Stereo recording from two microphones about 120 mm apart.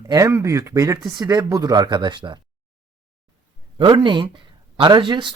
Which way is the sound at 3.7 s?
45° right (ahead or behind).